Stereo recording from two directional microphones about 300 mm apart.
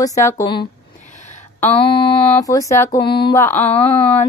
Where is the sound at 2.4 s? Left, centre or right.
Centre.